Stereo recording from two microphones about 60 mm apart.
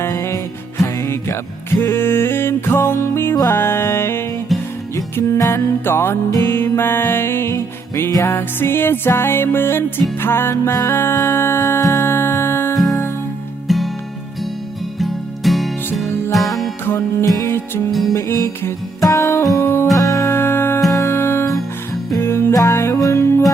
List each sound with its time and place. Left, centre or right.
0.0 s music: left
1.8 s music: left
5.5 s music: left
11.8 s music: left
12.0 s music: left
12.7 s music: centre
14.9 s music: centre
16.8 s music: left
19.0 s music: left
19.5 s music: left
20.0 s music: left
20.3 s music: left